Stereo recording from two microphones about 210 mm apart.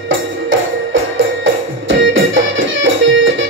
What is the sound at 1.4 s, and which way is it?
Music, 65° right (ahead or behind).